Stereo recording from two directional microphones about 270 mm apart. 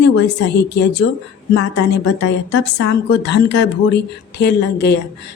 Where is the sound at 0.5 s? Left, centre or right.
Left.